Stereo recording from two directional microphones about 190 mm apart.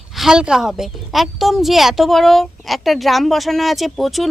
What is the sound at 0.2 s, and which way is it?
A woman's voice, 5° right (ahead or behind).